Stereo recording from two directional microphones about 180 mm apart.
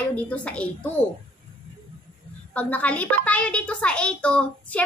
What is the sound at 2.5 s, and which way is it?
A child's voice, 10° left (ahead or behind).